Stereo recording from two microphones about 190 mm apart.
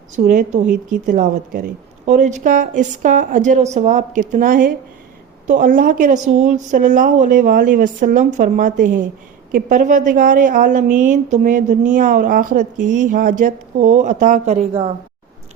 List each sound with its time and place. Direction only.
0.3 s a woman's voice: 40° right (ahead or behind)